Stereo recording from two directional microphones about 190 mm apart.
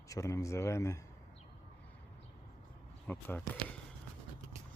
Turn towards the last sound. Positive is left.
turn(degrees=10)  # may be behind; listen again after turning